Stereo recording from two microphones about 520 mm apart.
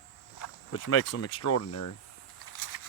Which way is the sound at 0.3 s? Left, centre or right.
Left.